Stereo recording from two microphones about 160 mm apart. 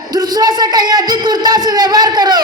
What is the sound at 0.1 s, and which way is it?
A man's voice, 25° right (ahead or behind).